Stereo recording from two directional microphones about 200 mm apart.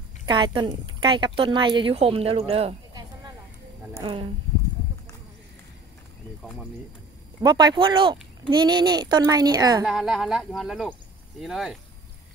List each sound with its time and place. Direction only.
0.3 s speech: 25° right (ahead or behind)
4.0 s speech: 25° right (ahead or behind)
7.4 s speech: 20° right (ahead or behind)
9.8 s speech: centre (ahead or behind)